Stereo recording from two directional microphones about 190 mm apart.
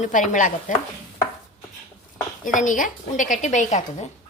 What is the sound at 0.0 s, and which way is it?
Stir, 40° left (ahead or behind).